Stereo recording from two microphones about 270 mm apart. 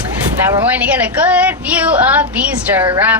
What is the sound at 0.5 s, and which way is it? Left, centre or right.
A woman's voice, centre.